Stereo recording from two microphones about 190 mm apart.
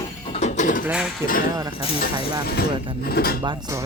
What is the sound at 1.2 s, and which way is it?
Speech, 50° left (ahead or behind).